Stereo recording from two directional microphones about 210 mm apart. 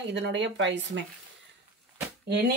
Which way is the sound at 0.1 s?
60° right (ahead or behind).